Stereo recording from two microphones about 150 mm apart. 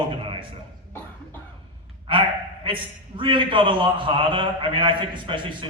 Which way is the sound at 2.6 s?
35° right (ahead or behind).